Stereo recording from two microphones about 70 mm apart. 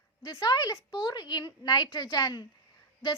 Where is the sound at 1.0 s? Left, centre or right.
Left.